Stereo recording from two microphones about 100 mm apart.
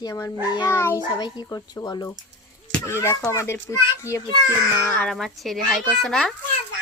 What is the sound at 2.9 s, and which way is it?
Child singing, 25° left (ahead or behind).